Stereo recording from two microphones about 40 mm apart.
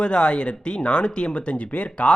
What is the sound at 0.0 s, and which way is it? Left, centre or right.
Speech, left.